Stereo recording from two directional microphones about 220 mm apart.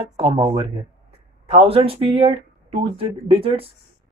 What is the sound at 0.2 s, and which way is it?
Speech, 25° right (ahead or behind).